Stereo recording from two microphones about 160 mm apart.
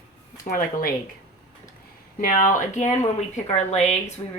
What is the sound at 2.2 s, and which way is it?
Speech, 55° left (ahead or behind).